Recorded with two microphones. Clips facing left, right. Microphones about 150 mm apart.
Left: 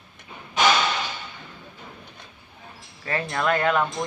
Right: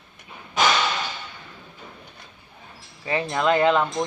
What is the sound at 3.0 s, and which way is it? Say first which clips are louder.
Speech: right 3 dB; 15° right (ahead or behind).